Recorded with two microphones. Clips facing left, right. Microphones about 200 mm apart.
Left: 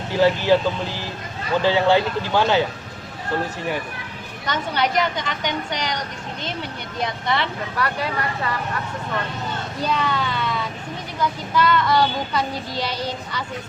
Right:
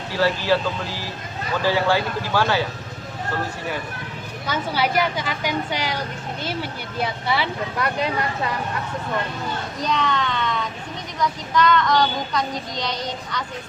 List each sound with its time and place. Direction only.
0.2 s speech: 20° left (ahead or behind)
1.6 s speech: 20° left (ahead or behind)
4.4 s a woman's voice: 5° right (ahead or behind)
7.0 s a woman's voice: 5° right (ahead or behind)
7.8 s speech: 20° right (ahead or behind)
9.8 s speech: 5° left (ahead or behind)